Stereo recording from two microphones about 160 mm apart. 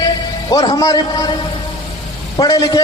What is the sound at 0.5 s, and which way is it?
Speech, 25° left (ahead or behind).